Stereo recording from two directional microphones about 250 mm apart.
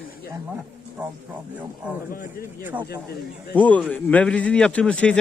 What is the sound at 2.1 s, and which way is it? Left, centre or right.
Speech, left.